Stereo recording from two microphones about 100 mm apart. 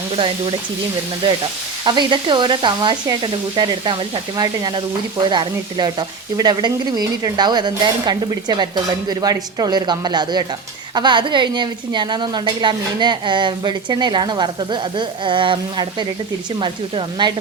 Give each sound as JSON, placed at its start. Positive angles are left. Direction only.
{"t": 1.8, "sound": "speech", "side_deg": -55}